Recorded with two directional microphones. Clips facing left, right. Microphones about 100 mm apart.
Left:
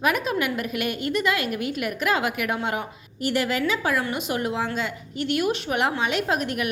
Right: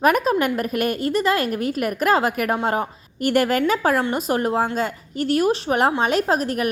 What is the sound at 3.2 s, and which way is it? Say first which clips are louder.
A woman's voice: right 5 dB; 50° right (ahead or behind).